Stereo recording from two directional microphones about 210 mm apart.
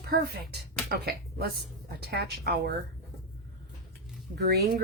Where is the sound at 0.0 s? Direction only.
45° right (ahead or behind).